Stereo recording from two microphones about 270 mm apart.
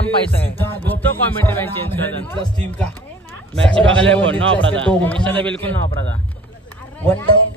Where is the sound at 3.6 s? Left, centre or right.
Centre.